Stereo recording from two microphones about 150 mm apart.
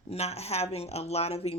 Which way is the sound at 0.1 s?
45° left (ahead or behind).